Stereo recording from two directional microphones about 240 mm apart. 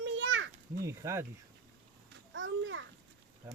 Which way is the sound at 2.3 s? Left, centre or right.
Right.